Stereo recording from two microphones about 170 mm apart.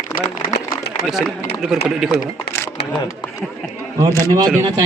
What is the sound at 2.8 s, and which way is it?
Speech, 75° left (ahead or behind).